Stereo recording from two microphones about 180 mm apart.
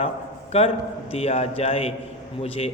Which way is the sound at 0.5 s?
35° left (ahead or behind).